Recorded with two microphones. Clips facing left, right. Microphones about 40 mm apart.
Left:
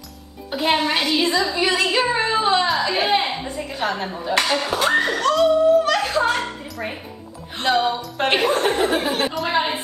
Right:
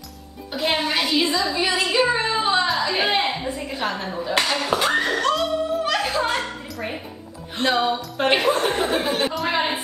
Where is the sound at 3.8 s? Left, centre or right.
Centre.